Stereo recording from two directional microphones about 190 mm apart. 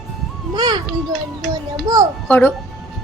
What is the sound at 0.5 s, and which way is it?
Children playing, 20° right (ahead or behind).